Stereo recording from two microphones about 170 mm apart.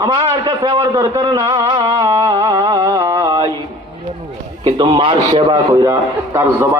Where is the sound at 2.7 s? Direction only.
20° right (ahead or behind).